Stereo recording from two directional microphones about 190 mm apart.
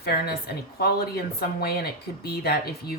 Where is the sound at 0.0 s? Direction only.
55° left (ahead or behind).